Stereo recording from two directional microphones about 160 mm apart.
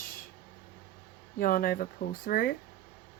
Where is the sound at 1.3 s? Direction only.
65° left (ahead or behind).